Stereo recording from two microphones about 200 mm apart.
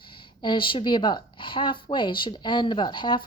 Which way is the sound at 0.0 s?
25° left (ahead or behind).